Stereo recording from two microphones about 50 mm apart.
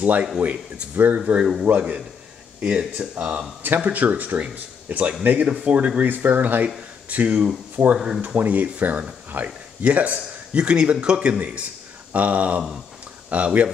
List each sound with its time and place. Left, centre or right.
0.0 s a man's voice: right
3.6 s a man's voice: right